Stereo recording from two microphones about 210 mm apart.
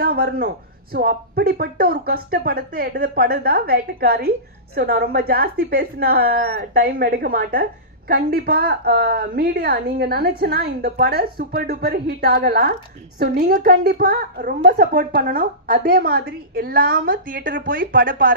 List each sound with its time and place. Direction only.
0.0 s a woman's voice: 50° right (ahead or behind)